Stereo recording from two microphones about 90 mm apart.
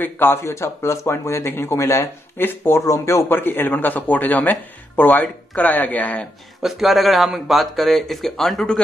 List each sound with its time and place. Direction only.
0.0 s speech: 25° left (ahead or behind)
3.3 s speech: 25° left (ahead or behind)
6.6 s speech: centre (ahead or behind)